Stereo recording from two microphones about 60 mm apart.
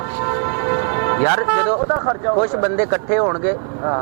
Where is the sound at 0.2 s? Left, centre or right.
Centre.